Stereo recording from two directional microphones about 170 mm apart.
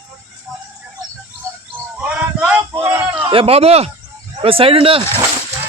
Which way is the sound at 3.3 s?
35° right (ahead or behind).